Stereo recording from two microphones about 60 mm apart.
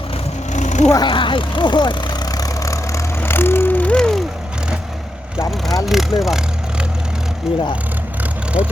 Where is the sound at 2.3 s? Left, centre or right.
Left.